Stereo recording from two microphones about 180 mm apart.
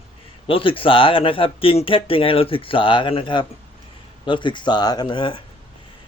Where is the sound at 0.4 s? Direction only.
30° left (ahead or behind).